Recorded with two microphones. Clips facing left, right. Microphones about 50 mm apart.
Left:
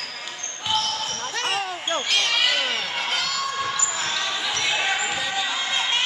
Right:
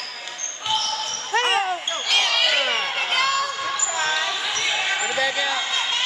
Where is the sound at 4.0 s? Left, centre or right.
Right.